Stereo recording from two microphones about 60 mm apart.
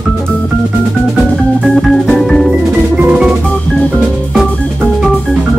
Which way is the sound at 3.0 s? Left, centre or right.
Centre.